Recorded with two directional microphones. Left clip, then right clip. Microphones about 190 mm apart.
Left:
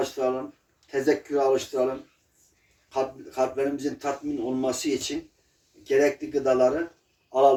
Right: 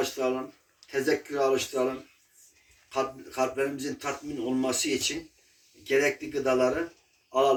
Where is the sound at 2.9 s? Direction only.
15° left (ahead or behind).